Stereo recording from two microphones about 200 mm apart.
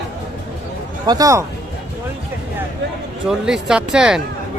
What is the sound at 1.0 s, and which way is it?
Speech, 20° right (ahead or behind).